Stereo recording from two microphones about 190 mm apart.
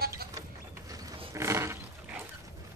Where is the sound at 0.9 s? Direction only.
20° right (ahead or behind).